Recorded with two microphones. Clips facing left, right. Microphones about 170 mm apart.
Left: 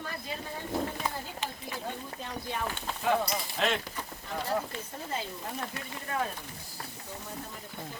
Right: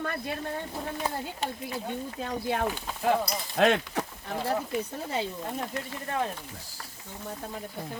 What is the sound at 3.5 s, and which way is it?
Speech, 70° right (ahead or behind).